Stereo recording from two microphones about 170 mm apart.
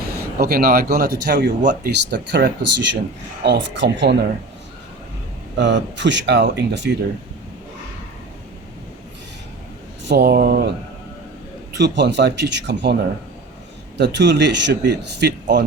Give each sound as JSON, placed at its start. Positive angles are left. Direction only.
{"t": 0.3, "sound": "speech", "side_deg": -65}
{"t": 5.5, "sound": "speech", "side_deg": -90}
{"t": 10.1, "sound": "speech", "side_deg": -75}
{"t": 11.8, "sound": "speech", "side_deg": -90}